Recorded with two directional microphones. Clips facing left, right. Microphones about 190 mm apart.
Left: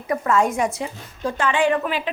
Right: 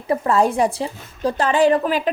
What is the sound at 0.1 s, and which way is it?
Speech, 35° right (ahead or behind).